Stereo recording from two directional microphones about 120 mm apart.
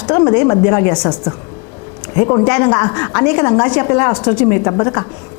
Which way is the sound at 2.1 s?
20° left (ahead or behind).